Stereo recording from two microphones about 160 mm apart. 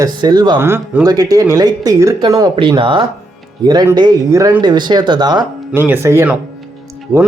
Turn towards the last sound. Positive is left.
turn(degrees=-5)  # may be behind; listen again after turning